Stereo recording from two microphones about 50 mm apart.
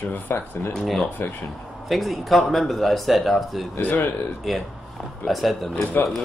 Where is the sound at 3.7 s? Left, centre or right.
Left.